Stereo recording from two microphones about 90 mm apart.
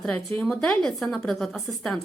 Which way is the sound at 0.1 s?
15° left (ahead or behind).